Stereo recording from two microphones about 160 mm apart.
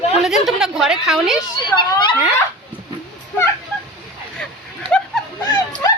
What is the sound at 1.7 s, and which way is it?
Speech, 30° left (ahead or behind).